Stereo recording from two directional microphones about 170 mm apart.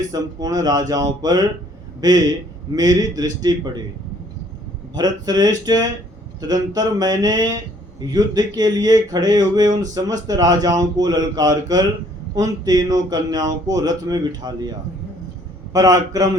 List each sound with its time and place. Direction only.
0.1 s a man's voice: 20° right (ahead or behind)
4.9 s speech: 25° right (ahead or behind)